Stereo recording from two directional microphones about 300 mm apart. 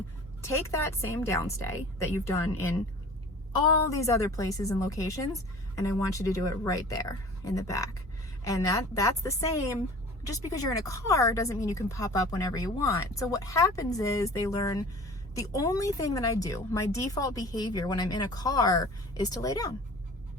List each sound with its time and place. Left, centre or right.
0.4 s speech: centre
3.9 s speech: centre